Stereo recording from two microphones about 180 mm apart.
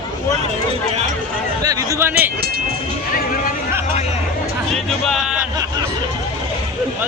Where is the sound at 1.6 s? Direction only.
20° right (ahead or behind).